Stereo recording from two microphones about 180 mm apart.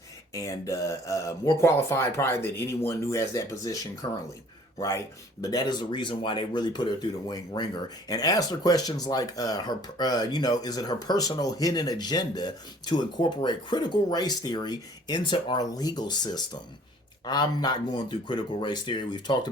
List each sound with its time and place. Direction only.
0.3 s speech: 15° left (ahead or behind)